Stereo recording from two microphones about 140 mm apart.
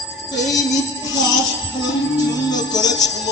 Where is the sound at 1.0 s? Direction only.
30° left (ahead or behind).